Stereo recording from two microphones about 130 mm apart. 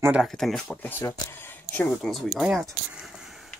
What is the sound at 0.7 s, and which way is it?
Speech, 15° left (ahead or behind).